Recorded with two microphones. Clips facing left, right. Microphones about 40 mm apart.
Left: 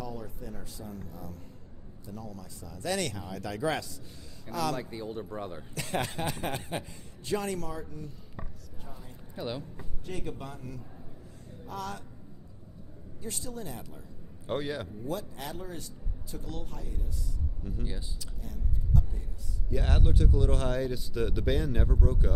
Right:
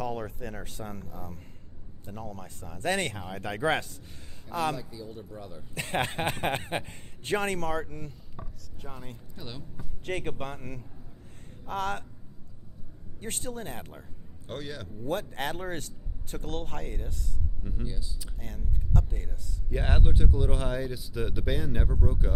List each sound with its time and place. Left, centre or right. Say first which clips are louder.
0.0 s speech: right 6 dB; right
1.1 s a man's voice: right 1 dB; right
4.7 s a man's voice: left 2 dB; left
5.7 s a man's voice: right 4 dB; right
8.8 s speech: right 6 dB; right
9.3 s speech: left 9 dB; centre
10.1 s a man's voice: right 5 dB; right
13.1 s a man's voice: right 3 dB; right
14.4 s a man's voice: left 5 dB; centre
15.0 s speech: right 9 dB; right
17.6 s speech: even; centre
18.3 s speech: right 1 dB; right
19.7 s speech: even; right; by 22.3 s centre